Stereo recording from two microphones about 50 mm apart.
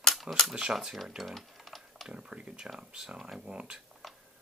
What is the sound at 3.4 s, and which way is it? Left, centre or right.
Speech, right.